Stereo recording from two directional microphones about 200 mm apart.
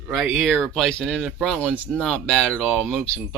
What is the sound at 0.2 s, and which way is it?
Speech, centre (ahead or behind).